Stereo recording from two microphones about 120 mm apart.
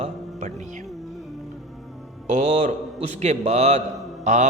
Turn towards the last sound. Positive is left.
turn(degrees=-80)